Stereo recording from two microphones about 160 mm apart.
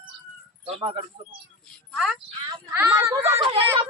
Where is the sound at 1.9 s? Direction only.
Centre (ahead or behind).